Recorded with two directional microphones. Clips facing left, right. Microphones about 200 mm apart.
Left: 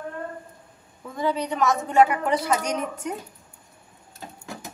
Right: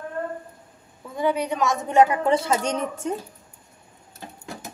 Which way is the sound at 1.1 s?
10° right (ahead or behind).